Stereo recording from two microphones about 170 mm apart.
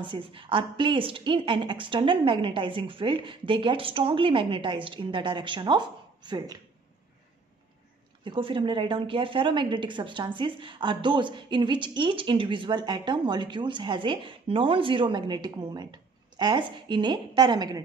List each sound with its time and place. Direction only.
0.0 s a woman's voice: 30° right (ahead or behind)
8.2 s a woman's voice: 30° right (ahead or behind)